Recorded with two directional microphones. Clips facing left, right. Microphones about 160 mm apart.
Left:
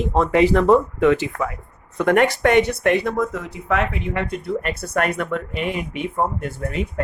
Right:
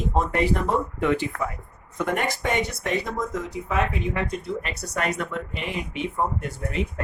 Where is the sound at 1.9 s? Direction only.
75° left (ahead or behind).